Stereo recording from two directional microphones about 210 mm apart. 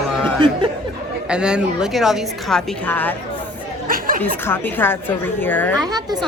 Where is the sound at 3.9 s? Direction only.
45° right (ahead or behind).